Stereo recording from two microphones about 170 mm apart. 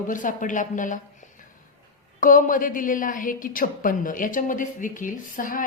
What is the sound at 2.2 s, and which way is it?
A woman's voice, 50° left (ahead or behind).